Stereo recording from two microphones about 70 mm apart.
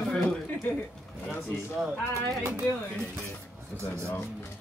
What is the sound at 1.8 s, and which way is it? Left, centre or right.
Speech, centre.